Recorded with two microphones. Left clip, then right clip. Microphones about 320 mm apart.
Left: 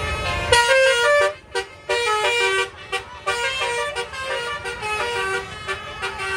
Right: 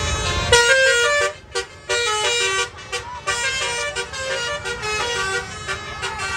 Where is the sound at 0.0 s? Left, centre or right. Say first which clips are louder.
Right 1 dB; centre.